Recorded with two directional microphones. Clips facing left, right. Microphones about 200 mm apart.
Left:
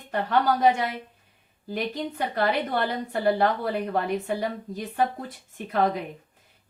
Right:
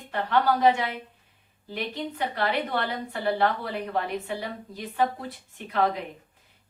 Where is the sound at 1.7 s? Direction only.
45° left (ahead or behind).